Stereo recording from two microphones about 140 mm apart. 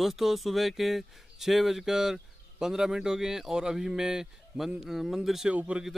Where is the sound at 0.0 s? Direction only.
Centre (ahead or behind).